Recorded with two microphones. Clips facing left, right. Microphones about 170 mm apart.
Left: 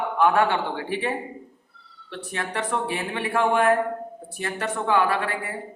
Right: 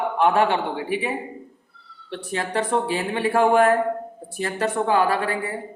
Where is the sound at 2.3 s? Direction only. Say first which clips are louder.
Right 4 dB; 30° right (ahead or behind).